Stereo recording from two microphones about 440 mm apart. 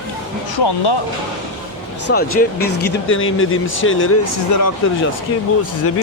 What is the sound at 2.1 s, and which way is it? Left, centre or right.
Speech, left.